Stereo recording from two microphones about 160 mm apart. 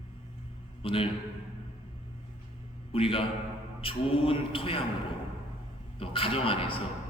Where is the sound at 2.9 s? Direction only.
35° left (ahead or behind).